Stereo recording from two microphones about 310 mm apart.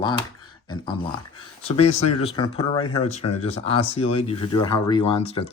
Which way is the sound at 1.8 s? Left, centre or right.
Centre.